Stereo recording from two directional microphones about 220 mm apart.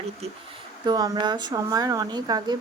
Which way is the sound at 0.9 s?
20° right (ahead or behind).